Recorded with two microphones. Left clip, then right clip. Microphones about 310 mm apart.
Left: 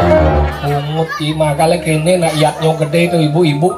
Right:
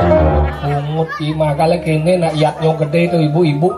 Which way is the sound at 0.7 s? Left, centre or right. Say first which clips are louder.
Left 1 dB; centre.